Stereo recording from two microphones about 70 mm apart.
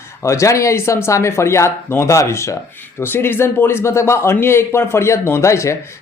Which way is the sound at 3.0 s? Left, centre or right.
Left.